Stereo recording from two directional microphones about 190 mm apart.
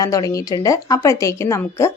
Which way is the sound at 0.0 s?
15° left (ahead or behind).